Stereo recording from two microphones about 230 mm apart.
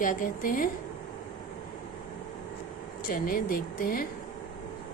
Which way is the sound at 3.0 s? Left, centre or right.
Left.